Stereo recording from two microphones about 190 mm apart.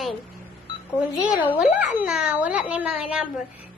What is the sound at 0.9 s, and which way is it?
A child's voice, 10° right (ahead or behind).